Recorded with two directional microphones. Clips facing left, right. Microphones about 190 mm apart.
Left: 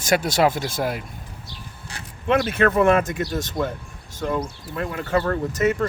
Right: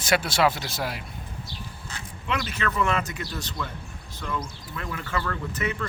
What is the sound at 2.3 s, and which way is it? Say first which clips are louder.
Speech: left 10 dB; 55° left (ahead or behind).